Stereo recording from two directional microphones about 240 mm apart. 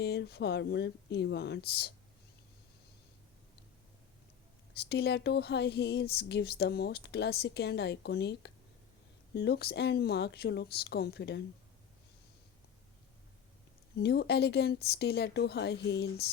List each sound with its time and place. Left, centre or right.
0.0 s speech: left
4.7 s speech: left
14.0 s speech: left